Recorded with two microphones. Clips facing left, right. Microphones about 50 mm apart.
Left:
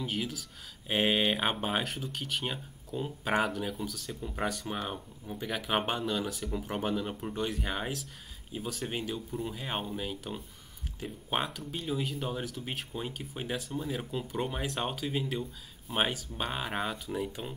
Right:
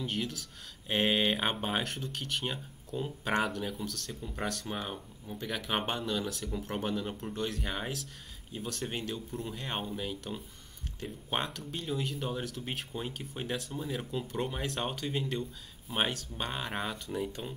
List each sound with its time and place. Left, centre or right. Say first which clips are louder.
0.0 s speech: left 1 dB; centre